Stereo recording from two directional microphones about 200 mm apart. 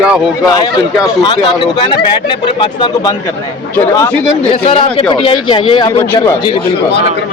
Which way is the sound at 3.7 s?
10° left (ahead or behind).